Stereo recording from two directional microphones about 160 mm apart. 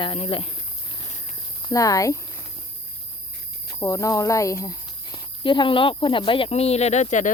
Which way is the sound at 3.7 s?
20° left (ahead or behind).